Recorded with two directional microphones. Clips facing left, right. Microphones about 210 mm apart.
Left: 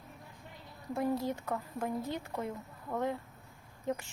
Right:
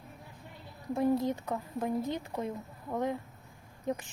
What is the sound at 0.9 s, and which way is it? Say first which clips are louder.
Speech: right 4 dB; 20° right (ahead or behind).